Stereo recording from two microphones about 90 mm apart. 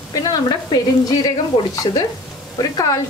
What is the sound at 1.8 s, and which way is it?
Speech, 70° left (ahead or behind).